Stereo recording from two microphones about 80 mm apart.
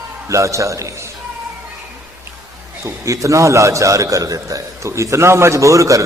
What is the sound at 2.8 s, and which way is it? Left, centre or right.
A man's voice, right.